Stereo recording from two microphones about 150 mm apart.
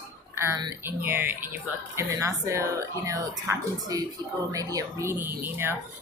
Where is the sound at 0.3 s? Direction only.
20° right (ahead or behind).